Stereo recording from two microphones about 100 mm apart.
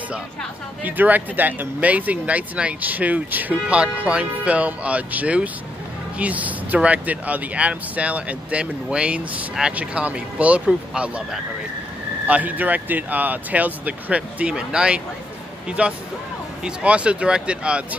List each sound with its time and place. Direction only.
0.8 s speech: 15° right (ahead or behind)
12.3 s speech: 15° right (ahead or behind)